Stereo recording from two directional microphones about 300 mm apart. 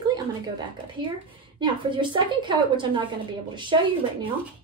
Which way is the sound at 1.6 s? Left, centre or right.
Centre.